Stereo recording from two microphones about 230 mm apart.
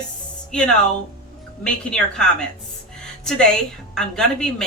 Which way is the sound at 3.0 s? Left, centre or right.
Centre.